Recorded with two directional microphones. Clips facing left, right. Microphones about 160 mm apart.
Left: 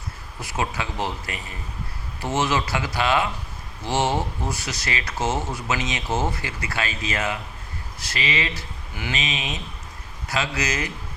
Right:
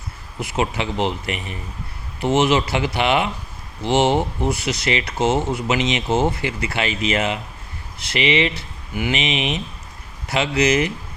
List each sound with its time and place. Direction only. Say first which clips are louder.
0.3 s speech: right 5 dB; 20° right (ahead or behind)